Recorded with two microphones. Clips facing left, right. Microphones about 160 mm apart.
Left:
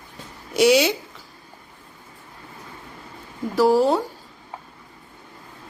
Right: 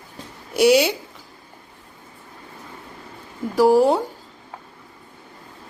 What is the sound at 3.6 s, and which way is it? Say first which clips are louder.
Speech: right 2 dB; 15° right (ahead or behind).